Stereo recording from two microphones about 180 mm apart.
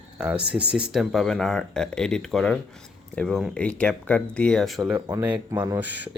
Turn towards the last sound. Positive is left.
turn(degrees=-10)  # may be behind; listen again after turning